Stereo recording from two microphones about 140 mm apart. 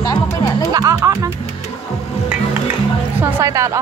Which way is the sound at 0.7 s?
25° right (ahead or behind).